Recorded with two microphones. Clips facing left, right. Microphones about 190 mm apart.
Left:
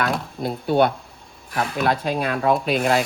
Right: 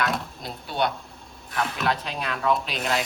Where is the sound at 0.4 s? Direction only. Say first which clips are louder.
Left 9 dB; 55° left (ahead or behind).